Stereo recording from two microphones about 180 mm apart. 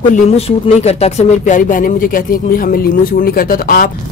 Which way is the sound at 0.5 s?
35° left (ahead or behind).